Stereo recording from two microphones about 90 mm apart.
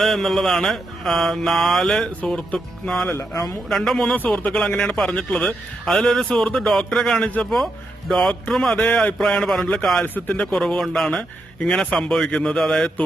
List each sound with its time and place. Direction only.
0.0 s mantra: centre (ahead or behind)
3.1 s speech: 40° left (ahead or behind)
3.7 s mantra: 5° left (ahead or behind)
4.4 s speech: 5° left (ahead or behind)
5.8 s mantra: 5° left (ahead or behind)
10.0 s speech: 20° left (ahead or behind)
10.5 s mantra: 5° left (ahead or behind)